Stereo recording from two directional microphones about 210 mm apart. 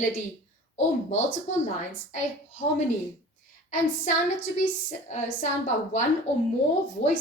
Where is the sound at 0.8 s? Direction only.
35° left (ahead or behind).